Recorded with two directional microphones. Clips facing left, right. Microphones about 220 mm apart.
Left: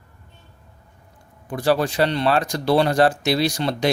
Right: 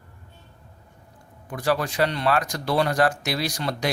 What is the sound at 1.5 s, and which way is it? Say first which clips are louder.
Speech: left 5 dB; 30° left (ahead or behind).